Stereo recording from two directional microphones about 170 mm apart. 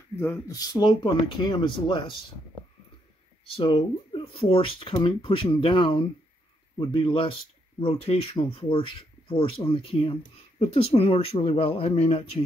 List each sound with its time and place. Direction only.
0.2 s speech: 20° left (ahead or behind)
3.5 s speech: 30° left (ahead or behind)